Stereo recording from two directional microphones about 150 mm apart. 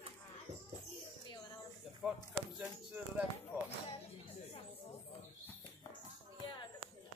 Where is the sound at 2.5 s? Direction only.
10° right (ahead or behind).